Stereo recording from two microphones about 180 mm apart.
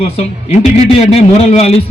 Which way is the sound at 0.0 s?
35° left (ahead or behind).